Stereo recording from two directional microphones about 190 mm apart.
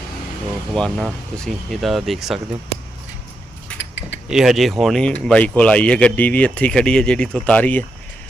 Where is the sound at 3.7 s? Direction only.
65° left (ahead or behind).